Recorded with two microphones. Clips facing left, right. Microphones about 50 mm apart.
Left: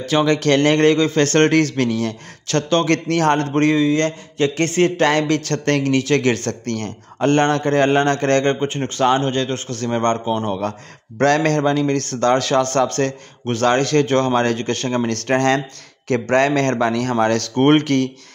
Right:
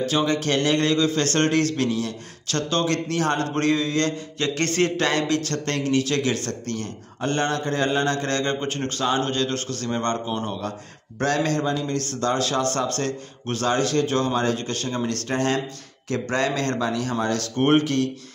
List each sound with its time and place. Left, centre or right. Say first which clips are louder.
0.2 s speech: left 10 dB; left
3.5 s a man's voice: left 6 dB; left
8.5 s a man's voice: left 6 dB; left
11.1 s a man's voice: left 7 dB; left
12.0 s speech: left 6 dB; left
15.2 s a man's voice: left 7 dB; left
16.1 s a man's voice: left 7 dB; left